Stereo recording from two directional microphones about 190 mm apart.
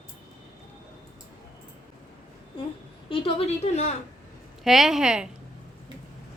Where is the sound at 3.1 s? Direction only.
30° left (ahead or behind).